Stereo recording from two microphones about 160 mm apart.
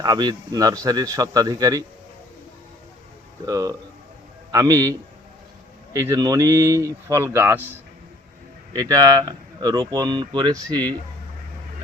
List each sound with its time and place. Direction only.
0.0 s speech: 25° right (ahead or behind)
3.4 s speech: 20° right (ahead or behind)
8.7 s speech: 20° right (ahead or behind)